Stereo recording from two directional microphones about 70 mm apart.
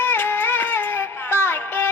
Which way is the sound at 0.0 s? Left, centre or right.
Left.